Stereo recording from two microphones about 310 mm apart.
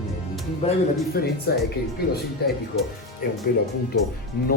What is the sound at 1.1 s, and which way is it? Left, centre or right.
Speech, left.